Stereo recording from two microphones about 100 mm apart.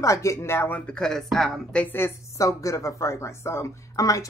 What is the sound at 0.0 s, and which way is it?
Speech, 30° left (ahead or behind).